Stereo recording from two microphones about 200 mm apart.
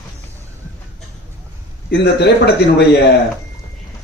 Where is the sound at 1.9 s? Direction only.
55° left (ahead or behind).